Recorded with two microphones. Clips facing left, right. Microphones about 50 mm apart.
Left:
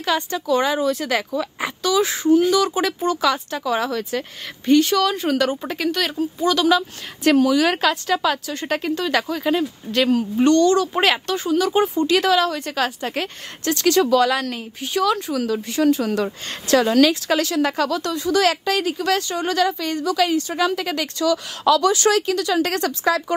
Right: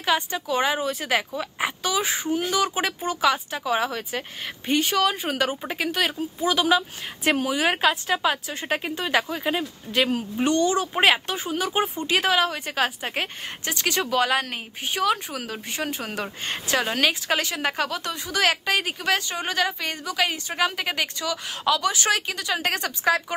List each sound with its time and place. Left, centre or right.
0.0 s a woman's voice: centre